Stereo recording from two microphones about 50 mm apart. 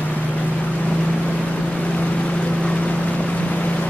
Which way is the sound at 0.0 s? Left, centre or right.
Left.